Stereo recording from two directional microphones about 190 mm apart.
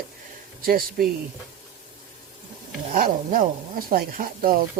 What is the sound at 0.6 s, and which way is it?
Speech, 50° right (ahead or behind).